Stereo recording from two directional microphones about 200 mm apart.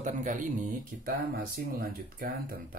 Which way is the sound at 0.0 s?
40° right (ahead or behind).